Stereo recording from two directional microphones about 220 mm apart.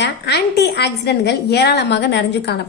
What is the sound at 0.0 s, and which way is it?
A woman's voice, 50° left (ahead or behind).